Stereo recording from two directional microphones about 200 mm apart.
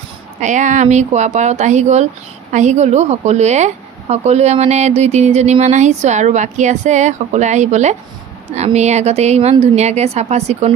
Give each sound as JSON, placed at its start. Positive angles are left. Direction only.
{"t": 0.4, "sound": "a woman's voice", "side_deg": -35}